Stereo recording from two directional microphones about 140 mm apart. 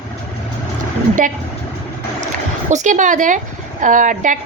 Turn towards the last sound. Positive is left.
turn(degrees=-65)  # may be behind; listen again after turning